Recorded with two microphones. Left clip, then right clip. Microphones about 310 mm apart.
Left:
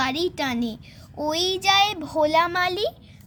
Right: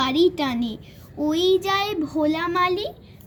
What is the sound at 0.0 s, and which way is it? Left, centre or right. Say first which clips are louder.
A woman's voice: right 4 dB; left.